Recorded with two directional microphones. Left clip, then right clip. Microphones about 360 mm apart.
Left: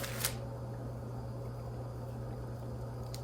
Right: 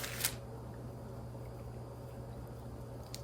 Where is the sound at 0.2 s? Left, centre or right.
Centre.